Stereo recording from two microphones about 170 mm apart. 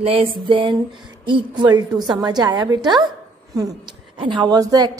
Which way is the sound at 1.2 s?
30° right (ahead or behind).